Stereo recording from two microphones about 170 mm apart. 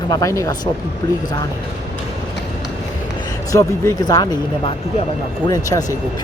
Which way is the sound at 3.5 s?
20° left (ahead or behind).